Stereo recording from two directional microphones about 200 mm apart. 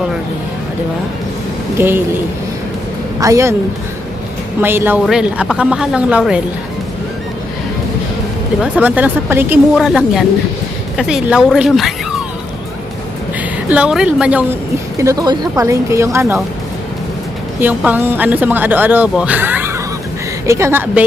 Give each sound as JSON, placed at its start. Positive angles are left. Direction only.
{"t": 1.8, "sound": "speech", "side_deg": -10}
{"t": 4.6, "sound": "a woman's voice", "side_deg": -10}
{"t": 8.6, "sound": "a woman's voice", "side_deg": -10}
{"t": 13.7, "sound": "a woman's voice", "side_deg": -5}
{"t": 14.9, "sound": "speech", "side_deg": -15}
{"t": 17.6, "sound": "speech", "side_deg": -10}